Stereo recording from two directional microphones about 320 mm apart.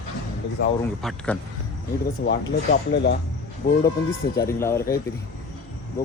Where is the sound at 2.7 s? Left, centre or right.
Left.